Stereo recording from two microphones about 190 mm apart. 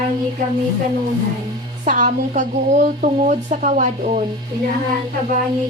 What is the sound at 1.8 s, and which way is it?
Speech, 40° right (ahead or behind).